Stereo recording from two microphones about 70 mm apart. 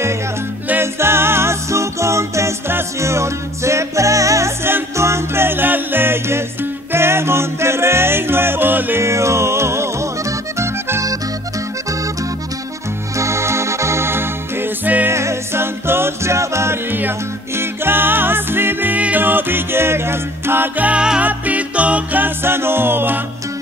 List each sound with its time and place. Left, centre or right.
0.7 s music: right
4.6 s music: right
9.0 s music: right
10.6 s accordion: right
13.2 s music: right
15.0 s music: right